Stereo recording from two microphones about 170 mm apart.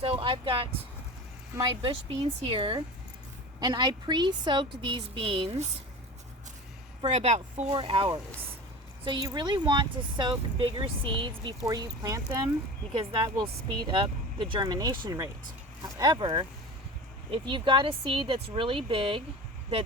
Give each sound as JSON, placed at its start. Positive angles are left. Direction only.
{"t": 0.0, "sound": "speech", "side_deg": -30}
{"t": 7.2, "sound": "speech", "side_deg": -40}
{"t": 7.7, "sound": "speech", "side_deg": -30}